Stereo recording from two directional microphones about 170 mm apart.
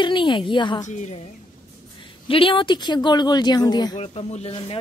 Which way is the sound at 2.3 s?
30° left (ahead or behind).